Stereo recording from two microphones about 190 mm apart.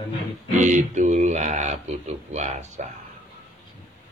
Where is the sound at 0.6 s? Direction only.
40° right (ahead or behind).